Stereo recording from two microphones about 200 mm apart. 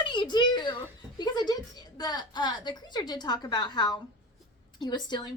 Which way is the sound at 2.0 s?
20° left (ahead or behind).